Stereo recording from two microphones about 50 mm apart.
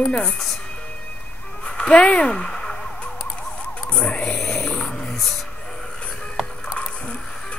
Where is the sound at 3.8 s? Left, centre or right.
Left.